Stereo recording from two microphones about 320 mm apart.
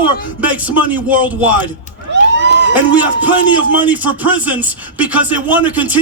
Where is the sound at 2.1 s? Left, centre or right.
Right.